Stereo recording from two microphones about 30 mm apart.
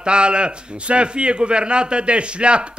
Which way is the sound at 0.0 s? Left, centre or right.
Right.